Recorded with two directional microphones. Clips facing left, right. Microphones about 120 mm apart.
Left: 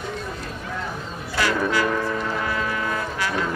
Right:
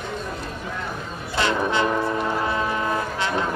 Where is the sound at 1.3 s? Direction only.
25° right (ahead or behind).